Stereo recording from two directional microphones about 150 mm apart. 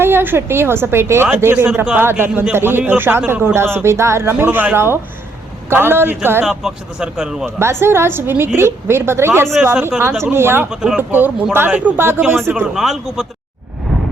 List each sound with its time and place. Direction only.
0.0 s a man's voice: 15° right (ahead or behind)
6.4 s speech: 5° right (ahead or behind)
7.6 s a man's voice: 15° right (ahead or behind)
10.7 s a man's voice: 5° right (ahead or behind)